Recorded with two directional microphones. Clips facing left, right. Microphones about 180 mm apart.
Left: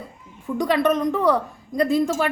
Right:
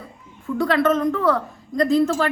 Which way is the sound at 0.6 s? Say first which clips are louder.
Right 1 dB; 15° left (ahead or behind).